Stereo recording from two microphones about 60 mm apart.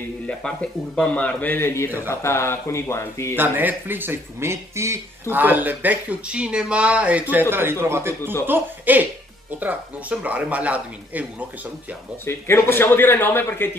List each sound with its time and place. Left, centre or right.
0.3 s speech: centre
1.6 s speech: left
3.3 s speech: right
5.3 s speech: right
7.4 s speech: right
8.5 s speech: right
12.3 s a man's voice: left